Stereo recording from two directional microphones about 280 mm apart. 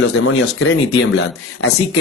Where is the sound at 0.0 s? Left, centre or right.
Left.